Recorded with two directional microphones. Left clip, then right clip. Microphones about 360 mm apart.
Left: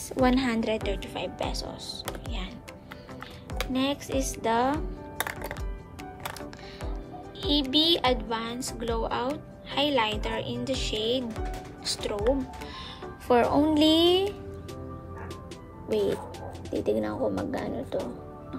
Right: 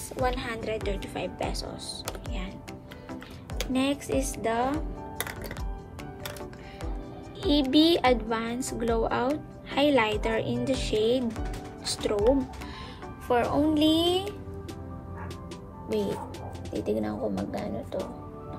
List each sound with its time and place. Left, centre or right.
0.2 s a woman's voice: centre
0.7 s a woman's voice: centre
3.7 s speech: centre
7.4 s a woman's voice: centre
13.3 s speech: centre
16.8 s a woman's voice: left
17.6 s a woman's voice: centre